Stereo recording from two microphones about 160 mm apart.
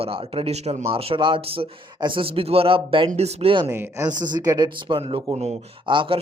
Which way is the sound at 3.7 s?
15° right (ahead or behind).